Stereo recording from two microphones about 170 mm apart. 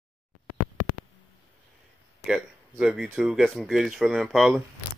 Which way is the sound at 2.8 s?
5° right (ahead or behind).